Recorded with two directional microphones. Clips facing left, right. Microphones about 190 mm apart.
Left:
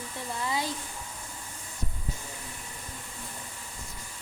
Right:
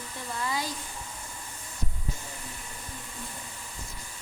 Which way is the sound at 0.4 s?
25° left (ahead or behind).